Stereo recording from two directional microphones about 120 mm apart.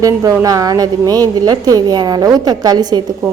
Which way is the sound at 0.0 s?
30° right (ahead or behind).